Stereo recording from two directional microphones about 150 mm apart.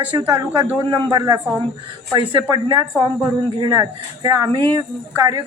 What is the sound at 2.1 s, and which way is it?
Speech, 35° right (ahead or behind).